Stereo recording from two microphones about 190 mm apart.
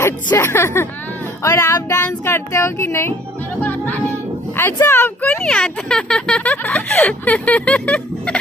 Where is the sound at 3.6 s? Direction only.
10° left (ahead or behind).